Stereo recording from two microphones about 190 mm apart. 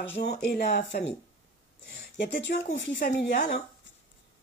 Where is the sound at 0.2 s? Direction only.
60° left (ahead or behind).